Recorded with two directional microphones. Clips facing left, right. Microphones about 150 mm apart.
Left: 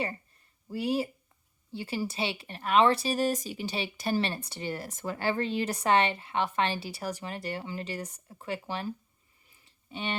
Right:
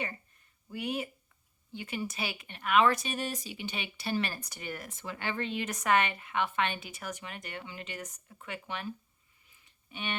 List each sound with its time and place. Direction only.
0.7 s speech: 30° left (ahead or behind)
4.2 s speech: 30° left (ahead or behind)
9.6 s a sound: 30° left (ahead or behind)